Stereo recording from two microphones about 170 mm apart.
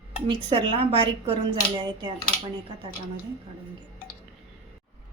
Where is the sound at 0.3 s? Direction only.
30° right (ahead or behind).